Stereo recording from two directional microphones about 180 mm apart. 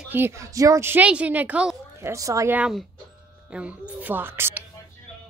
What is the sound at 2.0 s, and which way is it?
A woman's voice, 15° right (ahead or behind).